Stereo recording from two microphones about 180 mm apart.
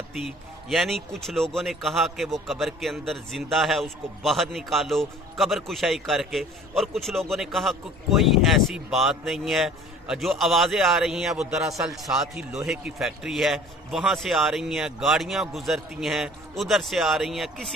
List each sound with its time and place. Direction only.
0.1 s speech: centre (ahead or behind)